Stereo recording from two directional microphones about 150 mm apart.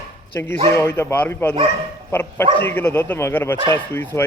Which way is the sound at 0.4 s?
15° left (ahead or behind).